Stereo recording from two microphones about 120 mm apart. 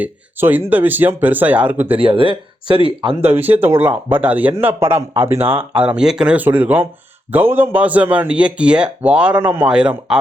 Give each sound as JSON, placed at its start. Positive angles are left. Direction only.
{"t": 0.0, "sound": "a man's voice", "side_deg": -15}
{"t": 2.0, "sound": "speech", "side_deg": -45}
{"t": 3.3, "sound": "a man's voice", "side_deg": -15}